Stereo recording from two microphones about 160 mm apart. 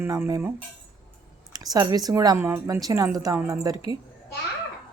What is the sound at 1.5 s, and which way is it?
Speech, 25° right (ahead or behind).